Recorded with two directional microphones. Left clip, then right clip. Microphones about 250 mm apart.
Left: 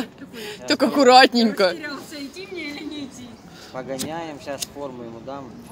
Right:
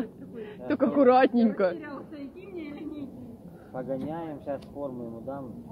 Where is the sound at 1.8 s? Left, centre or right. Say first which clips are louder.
Left 8 dB; centre.